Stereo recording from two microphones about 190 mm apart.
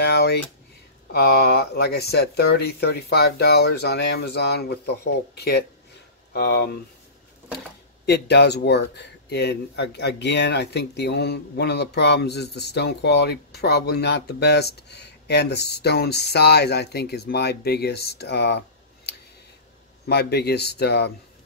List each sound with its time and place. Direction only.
0.0 s a sound: 60° left (ahead or behind)
1.1 s speech: 55° left (ahead or behind)
8.0 s speech: 60° left (ahead or behind)
20.1 s speech: 60° left (ahead or behind)